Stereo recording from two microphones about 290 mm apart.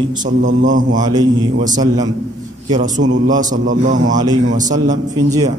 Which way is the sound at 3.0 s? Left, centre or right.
Right.